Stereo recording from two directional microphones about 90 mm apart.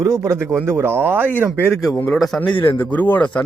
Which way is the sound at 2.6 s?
25° left (ahead or behind).